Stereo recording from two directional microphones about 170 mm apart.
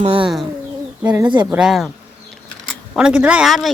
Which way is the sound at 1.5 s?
5° right (ahead or behind).